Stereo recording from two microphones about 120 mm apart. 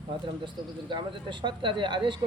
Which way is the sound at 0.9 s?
40° right (ahead or behind).